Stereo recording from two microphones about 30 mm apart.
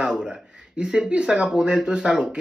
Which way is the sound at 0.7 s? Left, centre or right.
Right.